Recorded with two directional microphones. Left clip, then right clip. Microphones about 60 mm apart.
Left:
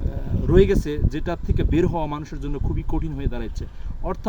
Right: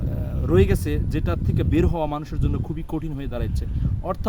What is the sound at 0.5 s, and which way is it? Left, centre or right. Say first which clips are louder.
Speech: left 3 dB; right.